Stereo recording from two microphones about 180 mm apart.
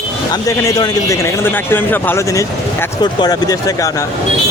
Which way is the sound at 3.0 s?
20° left (ahead or behind).